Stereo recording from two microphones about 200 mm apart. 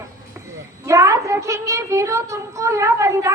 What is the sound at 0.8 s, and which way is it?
A woman's voice, 15° right (ahead or behind).